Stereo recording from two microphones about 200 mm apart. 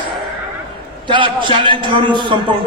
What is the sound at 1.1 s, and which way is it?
A man's voice, 25° right (ahead or behind).